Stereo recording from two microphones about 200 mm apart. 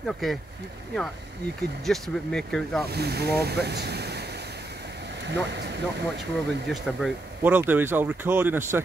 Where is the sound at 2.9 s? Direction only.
55° right (ahead or behind).